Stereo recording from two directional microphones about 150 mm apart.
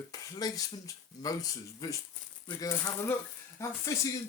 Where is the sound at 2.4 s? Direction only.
20° left (ahead or behind).